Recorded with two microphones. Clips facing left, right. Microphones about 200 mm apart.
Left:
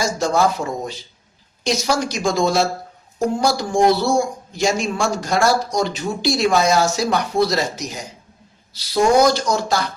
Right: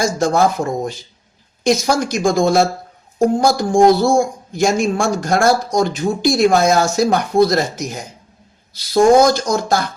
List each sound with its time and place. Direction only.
0.0 s speech: 50° right (ahead or behind)